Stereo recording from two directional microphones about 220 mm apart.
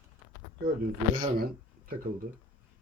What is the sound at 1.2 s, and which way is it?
Speech, 45° right (ahead or behind).